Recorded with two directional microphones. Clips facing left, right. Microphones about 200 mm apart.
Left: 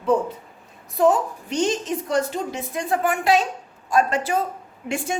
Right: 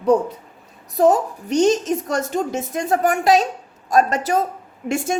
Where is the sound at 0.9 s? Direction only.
40° right (ahead or behind).